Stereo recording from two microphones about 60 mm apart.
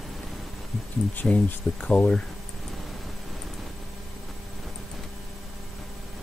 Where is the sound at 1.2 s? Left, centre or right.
Centre.